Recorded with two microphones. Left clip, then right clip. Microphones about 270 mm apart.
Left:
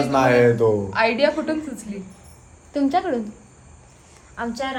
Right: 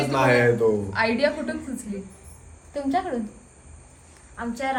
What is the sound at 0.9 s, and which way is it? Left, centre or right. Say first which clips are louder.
A woman's voice: left 4 dB; left.